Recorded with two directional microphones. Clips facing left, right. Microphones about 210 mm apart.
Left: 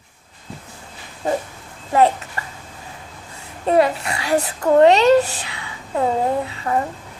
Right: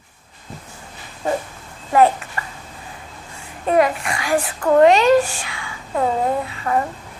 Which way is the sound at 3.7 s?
30° left (ahead or behind).